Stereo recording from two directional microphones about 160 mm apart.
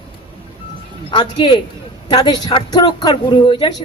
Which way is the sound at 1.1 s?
30° left (ahead or behind).